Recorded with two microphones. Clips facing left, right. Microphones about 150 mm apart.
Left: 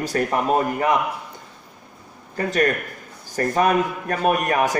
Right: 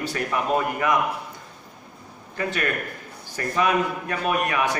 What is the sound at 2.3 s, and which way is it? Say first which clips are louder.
A man's voice: left 6 dB; 40° left (ahead or behind).